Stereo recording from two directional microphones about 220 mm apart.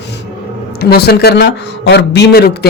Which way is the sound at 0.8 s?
45° left (ahead or behind).